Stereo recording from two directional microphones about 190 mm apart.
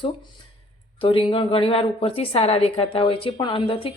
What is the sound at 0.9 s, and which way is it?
A woman's voice, 25° left (ahead or behind).